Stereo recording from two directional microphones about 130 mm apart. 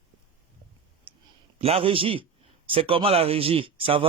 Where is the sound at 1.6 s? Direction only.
50° right (ahead or behind).